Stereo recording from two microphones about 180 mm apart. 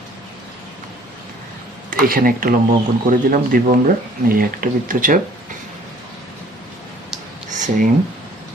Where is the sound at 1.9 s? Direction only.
50° right (ahead or behind).